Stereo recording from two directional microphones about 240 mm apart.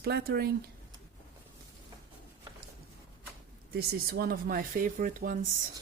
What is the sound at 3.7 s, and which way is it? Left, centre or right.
Speech, right.